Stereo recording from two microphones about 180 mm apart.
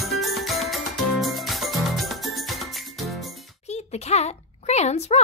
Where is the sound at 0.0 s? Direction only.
Centre (ahead or behind).